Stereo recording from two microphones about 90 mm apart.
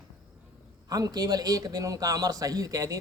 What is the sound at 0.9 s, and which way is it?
Speech, 45° right (ahead or behind).